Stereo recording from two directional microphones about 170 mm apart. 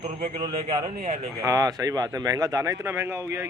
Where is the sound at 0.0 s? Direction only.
40° right (ahead or behind).